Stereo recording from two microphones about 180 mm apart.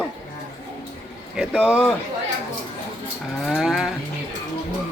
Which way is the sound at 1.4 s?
Centre (ahead or behind).